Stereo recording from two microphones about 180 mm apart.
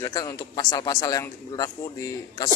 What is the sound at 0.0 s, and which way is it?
A man's voice, 20° left (ahead or behind).